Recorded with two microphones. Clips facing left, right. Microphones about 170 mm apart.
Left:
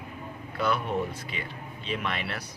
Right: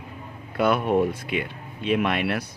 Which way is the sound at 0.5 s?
60° right (ahead or behind).